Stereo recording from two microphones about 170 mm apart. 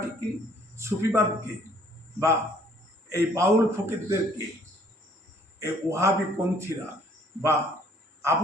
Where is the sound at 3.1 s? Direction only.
15° right (ahead or behind).